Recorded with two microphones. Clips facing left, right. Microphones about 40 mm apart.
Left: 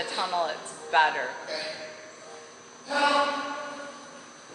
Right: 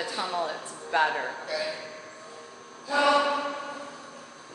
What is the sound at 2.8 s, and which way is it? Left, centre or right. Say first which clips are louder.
Chant: right 1 dB; centre.